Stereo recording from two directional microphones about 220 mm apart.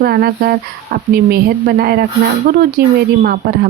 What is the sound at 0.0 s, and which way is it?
Speech, 45° right (ahead or behind).